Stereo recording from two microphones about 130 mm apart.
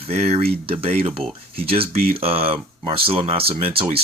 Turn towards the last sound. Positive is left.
turn(degrees=-45)  # may be behind; listen again after turning